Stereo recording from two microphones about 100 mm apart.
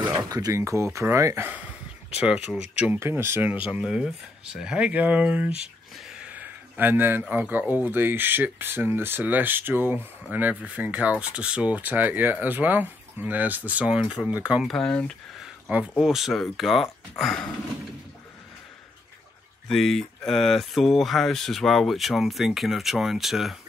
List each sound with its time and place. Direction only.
0.1 s speech: 40° right (ahead or behind); by 2.6 s 10° right (ahead or behind)
2.8 s speech: 20° right (ahead or behind)
5.6 s a sound: 10° right (ahead or behind)
7.8 s speech: 20° right (ahead or behind)
14.7 s speech: 5° left (ahead or behind)
16.0 s speech: 5° right (ahead or behind)
19.7 s speech: centre (ahead or behind)